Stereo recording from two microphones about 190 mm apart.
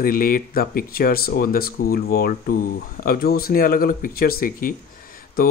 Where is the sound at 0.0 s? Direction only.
50° left (ahead or behind).